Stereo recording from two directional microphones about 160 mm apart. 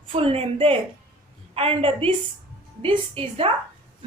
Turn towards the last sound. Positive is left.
turn(degrees=-35)  # may be behind; listen again after turning